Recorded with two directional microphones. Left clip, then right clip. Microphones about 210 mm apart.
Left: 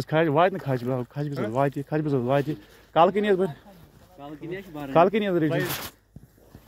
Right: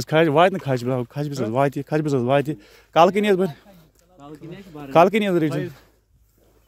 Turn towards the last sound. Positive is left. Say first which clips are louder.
# right 3 dB
turn(degrees=-50)  # may be behind; listen again after turning